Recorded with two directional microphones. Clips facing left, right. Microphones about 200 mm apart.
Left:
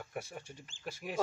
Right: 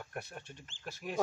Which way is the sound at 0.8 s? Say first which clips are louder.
Even; 10° left (ahead or behind).